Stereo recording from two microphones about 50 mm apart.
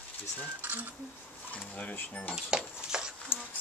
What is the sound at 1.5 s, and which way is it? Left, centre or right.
Speech, left.